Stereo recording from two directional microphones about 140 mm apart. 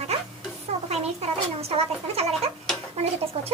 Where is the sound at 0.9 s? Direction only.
50° right (ahead or behind).